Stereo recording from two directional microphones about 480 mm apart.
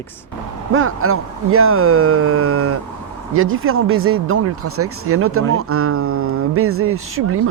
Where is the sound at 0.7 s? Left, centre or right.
Right.